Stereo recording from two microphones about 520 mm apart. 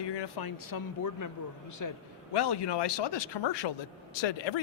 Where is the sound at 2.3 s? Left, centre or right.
Left.